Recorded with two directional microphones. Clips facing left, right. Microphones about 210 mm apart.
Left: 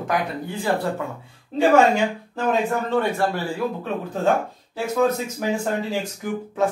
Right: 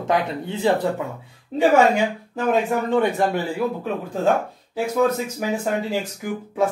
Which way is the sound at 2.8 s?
15° right (ahead or behind).